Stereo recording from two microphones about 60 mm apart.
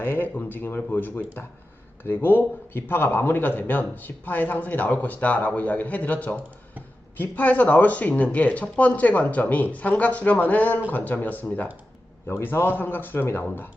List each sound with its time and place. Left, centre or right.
0.0 s a man's voice: left